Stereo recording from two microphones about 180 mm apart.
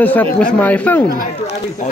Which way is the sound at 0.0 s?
10° left (ahead or behind).